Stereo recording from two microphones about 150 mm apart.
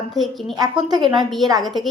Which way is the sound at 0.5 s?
25° right (ahead or behind).